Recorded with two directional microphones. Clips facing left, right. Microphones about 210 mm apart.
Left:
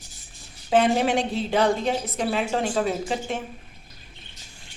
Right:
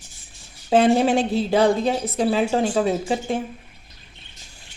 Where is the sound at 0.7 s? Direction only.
30° right (ahead or behind).